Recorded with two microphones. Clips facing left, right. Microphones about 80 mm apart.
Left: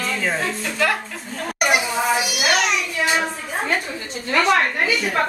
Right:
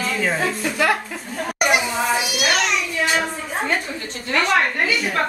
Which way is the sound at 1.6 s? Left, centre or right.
Centre.